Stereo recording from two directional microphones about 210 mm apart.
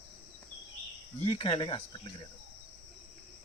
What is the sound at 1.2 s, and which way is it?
Speech, 25° left (ahead or behind).